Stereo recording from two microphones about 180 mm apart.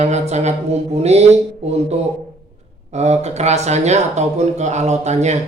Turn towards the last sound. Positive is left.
turn(degrees=-40)  # may be behind; listen again after turning